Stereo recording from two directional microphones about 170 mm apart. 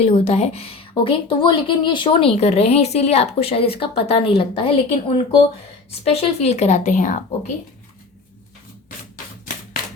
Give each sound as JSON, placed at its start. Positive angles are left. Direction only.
{"t": 0.0, "sound": "a woman's voice", "side_deg": 40}